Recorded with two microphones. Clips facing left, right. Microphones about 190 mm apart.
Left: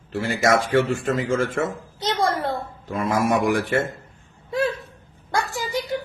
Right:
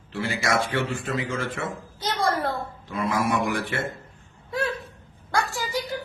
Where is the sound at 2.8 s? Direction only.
45° left (ahead or behind).